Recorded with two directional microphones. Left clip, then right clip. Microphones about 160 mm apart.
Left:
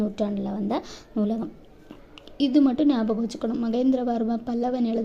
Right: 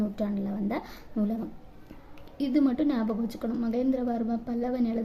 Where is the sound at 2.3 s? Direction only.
15° left (ahead or behind).